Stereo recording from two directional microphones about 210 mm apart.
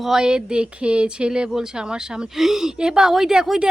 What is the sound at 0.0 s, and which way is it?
Speech, 5° right (ahead or behind).